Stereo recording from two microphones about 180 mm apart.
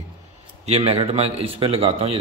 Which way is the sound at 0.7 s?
35° right (ahead or behind).